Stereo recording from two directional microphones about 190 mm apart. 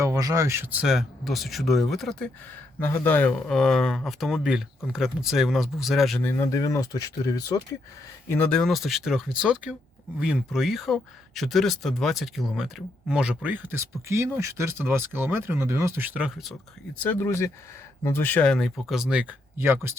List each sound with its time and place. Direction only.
0.0 s speech: 15° right (ahead or behind); by 6.3 s 5° left (ahead or behind)
6.3 s speech: 15° left (ahead or behind)
8.3 s speech: 5° left (ahead or behind)
17.0 s speech: 10° left (ahead or behind); by 20.0 s 15° right (ahead or behind)